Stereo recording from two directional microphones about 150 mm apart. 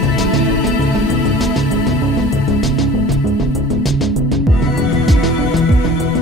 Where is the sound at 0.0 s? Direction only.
Centre (ahead or behind).